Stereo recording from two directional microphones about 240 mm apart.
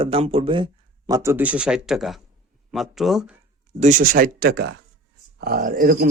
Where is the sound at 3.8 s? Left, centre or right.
Right.